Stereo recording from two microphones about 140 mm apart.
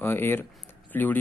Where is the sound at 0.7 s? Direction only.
10° left (ahead or behind).